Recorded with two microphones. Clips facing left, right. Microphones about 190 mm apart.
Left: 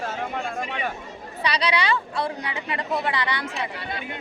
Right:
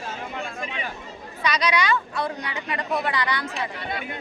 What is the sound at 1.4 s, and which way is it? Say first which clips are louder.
A woman's voice: right 1 dB; 30° left (ahead or behind).